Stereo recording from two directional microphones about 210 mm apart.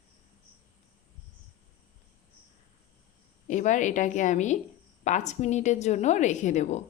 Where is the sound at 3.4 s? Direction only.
35° left (ahead or behind).